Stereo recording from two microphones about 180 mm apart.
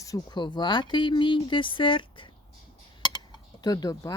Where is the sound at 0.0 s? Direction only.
20° left (ahead or behind).